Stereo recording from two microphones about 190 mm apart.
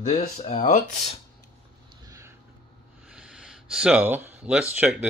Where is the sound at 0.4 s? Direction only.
35° left (ahead or behind).